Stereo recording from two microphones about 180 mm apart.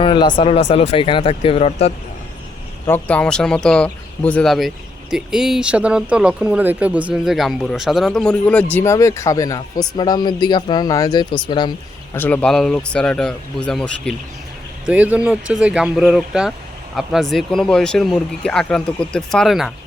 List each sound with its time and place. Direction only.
0.0 s speech: 25° left (ahead or behind)
2.8 s speech: 10° left (ahead or behind); by 11.7 s 25° left (ahead or behind)
12.1 s speech: 10° left (ahead or behind)
14.8 s speech: 10° right (ahead or behind)